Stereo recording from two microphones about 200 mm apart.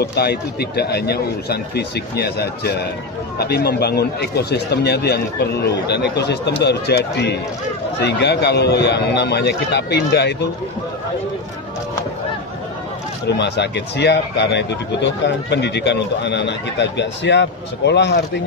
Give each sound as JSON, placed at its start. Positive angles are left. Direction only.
{"t": 0.0, "sound": "speech", "side_deg": 55}
{"t": 13.3, "sound": "speech", "side_deg": 60}